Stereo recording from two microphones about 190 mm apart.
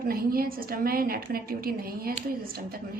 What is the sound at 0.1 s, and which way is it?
A woman's voice, 50° right (ahead or behind).